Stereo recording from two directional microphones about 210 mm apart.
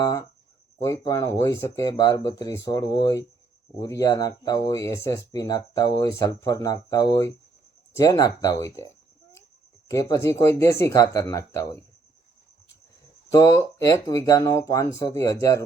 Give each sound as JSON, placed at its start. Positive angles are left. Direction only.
{"t": 0.0, "sound": "speech", "side_deg": 15}
{"t": 9.9, "sound": "speech", "side_deg": 15}
{"t": 13.3, "sound": "speech", "side_deg": 15}